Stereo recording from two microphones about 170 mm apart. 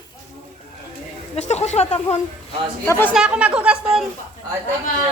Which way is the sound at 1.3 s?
40° left (ahead or behind).